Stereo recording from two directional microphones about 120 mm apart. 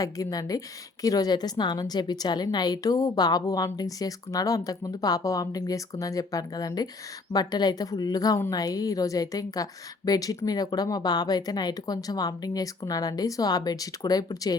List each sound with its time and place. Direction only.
0.0 s a woman's voice: 30° left (ahead or behind)